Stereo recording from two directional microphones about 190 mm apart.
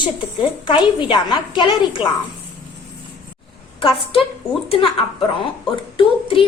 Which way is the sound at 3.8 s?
30° left (ahead or behind).